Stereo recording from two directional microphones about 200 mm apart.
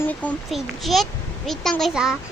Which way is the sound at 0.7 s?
Centre (ahead or behind).